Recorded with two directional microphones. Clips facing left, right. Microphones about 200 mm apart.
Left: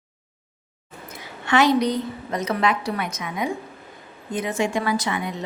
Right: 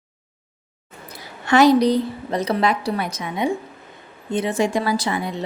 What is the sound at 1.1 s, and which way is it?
A woman's voice, 35° right (ahead or behind).